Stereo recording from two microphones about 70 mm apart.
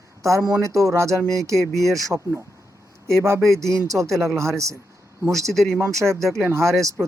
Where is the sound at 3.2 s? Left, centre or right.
Right.